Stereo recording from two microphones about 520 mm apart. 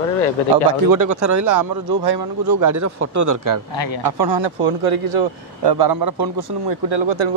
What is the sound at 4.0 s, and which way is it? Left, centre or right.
Speech, right.